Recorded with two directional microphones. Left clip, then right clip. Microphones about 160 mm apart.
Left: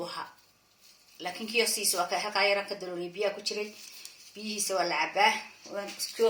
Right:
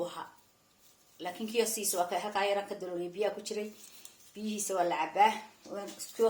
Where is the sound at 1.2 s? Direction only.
25° right (ahead or behind).